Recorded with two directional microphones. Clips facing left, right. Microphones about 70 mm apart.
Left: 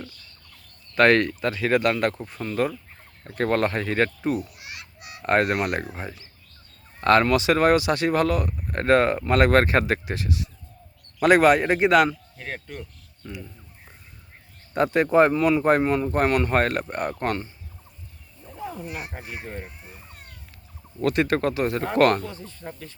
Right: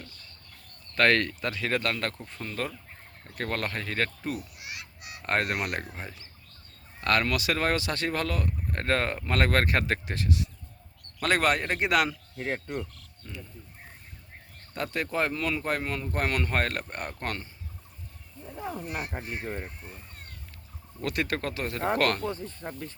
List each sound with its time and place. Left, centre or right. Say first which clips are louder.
0.9 s speech: left 6 dB; centre
1.4 s a man's voice: left 6 dB; centre
1.7 s speech: left 10 dB; centre
3.2 s speech: left 9 dB; left
4.4 s a sound: left 1 dB; centre
5.2 s a man's voice: left 7 dB; centre
7.0 s speech: left 8 dB; left
9.8 s a man's voice: left 4 dB; centre
14.8 s speech: left 11 dB; left
18.8 s a man's voice: even; centre
21.1 s speech: left 8 dB; left
22.6 s speech: left 2 dB; right